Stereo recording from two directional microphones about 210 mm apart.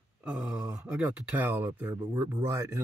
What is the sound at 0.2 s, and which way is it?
Speech, 5° right (ahead or behind).